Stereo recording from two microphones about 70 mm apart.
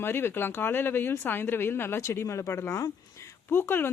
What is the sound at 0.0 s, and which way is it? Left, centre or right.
Speech, left.